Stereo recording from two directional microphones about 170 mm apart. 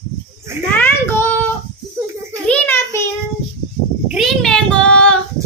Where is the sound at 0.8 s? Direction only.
10° left (ahead or behind).